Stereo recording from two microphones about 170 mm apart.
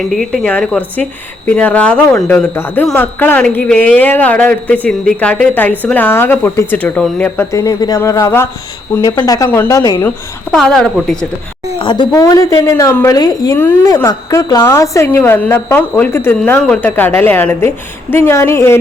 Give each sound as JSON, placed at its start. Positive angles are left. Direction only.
{"t": 0.1, "sound": "speech", "side_deg": 0}
{"t": 7.5, "sound": "a woman's voice", "side_deg": 20}
{"t": 10.5, "sound": "speech", "side_deg": 0}
{"t": 11.8, "sound": "a woman's voice", "side_deg": 30}